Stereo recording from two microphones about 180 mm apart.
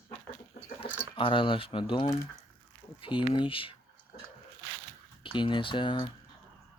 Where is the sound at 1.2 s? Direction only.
30° left (ahead or behind).